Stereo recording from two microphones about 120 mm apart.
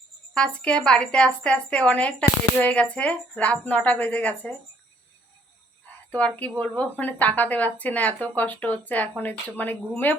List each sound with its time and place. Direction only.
0.3 s a woman's voice: 10° left (ahead or behind)
5.8 s cricket: 10° left (ahead or behind)
6.6 s a woman's voice: 15° left (ahead or behind)